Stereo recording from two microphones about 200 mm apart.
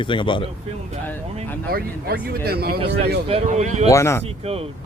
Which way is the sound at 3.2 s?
30° right (ahead or behind).